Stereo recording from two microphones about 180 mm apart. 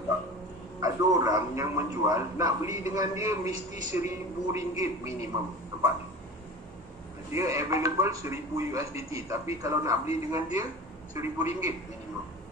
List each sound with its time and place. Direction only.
0.7 s a man's voice: 20° right (ahead or behind)
7.2 s a man's voice: 15° right (ahead or behind)